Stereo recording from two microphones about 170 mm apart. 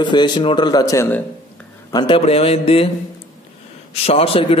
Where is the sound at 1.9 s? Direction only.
30° left (ahead or behind).